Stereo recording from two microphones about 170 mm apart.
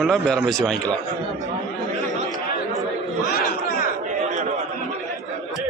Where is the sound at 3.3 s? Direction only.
65° left (ahead or behind).